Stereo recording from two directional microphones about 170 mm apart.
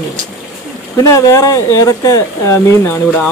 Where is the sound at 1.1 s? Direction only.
20° left (ahead or behind).